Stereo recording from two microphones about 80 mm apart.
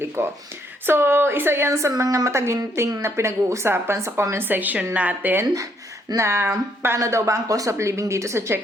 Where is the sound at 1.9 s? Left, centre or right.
Right.